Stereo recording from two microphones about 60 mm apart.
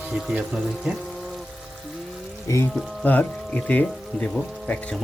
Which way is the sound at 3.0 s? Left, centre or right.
Left.